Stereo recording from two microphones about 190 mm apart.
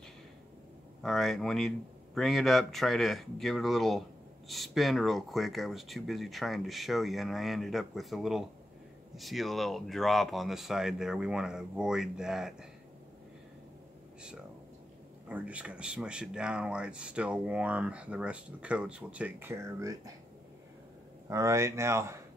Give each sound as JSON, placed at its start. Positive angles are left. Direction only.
{"t": 1.0, "sound": "speech", "side_deg": 0}
{"t": 15.2, "sound": "speech", "side_deg": -5}
{"t": 21.3, "sound": "speech", "side_deg": -15}